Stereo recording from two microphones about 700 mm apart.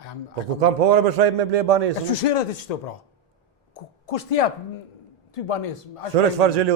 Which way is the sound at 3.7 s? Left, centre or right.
Left.